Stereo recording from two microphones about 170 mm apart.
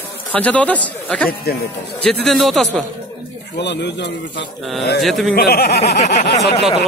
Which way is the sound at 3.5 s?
90° left.